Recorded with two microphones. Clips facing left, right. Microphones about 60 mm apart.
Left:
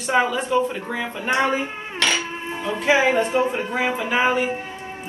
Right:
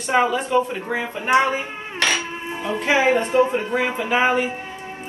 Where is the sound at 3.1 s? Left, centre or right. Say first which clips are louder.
Right 2 dB; centre.